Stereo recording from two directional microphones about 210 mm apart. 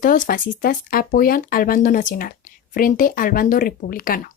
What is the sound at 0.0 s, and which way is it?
Speech, 40° left (ahead or behind).